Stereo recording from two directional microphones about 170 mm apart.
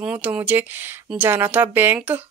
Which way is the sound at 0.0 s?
10° right (ahead or behind).